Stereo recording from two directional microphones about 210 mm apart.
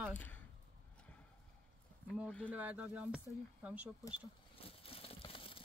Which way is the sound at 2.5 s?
5° right (ahead or behind).